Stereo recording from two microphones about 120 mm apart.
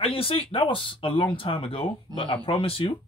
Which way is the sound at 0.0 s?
50° left (ahead or behind).